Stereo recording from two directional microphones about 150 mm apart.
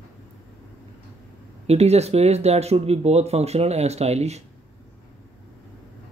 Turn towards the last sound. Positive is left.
turn(degrees=-45)  # may be behind; listen again after turning